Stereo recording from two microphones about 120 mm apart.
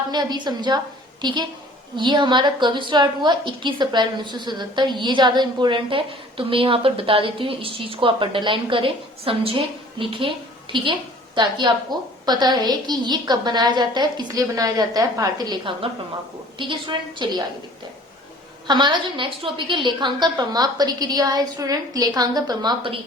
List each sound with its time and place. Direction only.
0.1 s a woman's voice: 35° right (ahead or behind)
18.7 s a woman's voice: 40° right (ahead or behind)